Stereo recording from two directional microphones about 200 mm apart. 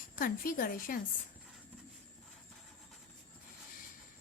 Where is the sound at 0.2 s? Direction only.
45° left (ahead or behind).